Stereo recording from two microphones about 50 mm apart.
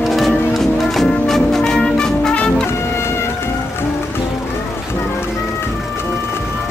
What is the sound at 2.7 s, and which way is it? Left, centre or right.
Music, left.